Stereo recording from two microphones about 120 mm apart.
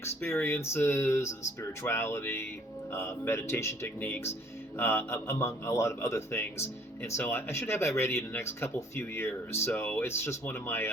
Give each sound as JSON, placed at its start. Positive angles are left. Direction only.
{"t": 0.0, "sound": "a man's voice", "side_deg": 20}